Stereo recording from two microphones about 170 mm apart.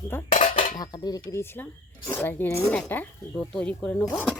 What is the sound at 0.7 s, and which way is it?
Speech, 25° left (ahead or behind).